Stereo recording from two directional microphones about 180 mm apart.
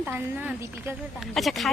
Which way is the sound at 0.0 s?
10° right (ahead or behind).